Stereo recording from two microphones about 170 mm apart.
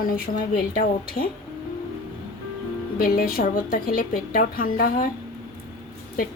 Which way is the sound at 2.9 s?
60° left (ahead or behind).